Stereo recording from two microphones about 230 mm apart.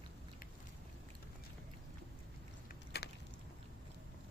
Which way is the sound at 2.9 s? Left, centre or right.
Left.